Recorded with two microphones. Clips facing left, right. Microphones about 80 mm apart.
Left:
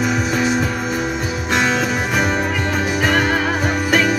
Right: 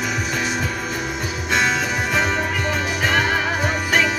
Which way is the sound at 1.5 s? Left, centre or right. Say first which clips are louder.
Left 2 dB; centre.